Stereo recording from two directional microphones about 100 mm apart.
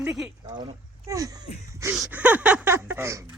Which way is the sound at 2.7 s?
25° right (ahead or behind).